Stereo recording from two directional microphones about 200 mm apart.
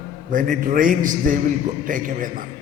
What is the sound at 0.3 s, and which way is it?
A man's voice, 40° right (ahead or behind).